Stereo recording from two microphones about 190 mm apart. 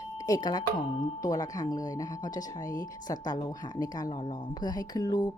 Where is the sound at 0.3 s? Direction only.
20° left (ahead or behind).